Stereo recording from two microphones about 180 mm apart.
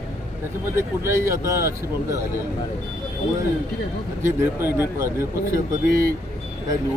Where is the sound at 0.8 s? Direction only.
15° right (ahead or behind).